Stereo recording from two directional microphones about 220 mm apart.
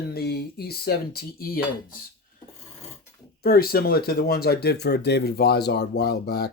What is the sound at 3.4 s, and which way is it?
Speech, 45° left (ahead or behind).